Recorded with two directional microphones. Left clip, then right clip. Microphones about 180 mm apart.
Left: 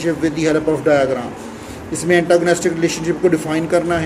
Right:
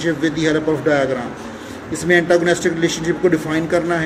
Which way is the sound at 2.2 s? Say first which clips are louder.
Left 1 dB; 5° right (ahead or behind).